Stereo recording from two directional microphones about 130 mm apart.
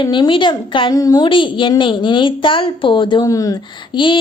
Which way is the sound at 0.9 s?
30° left (ahead or behind).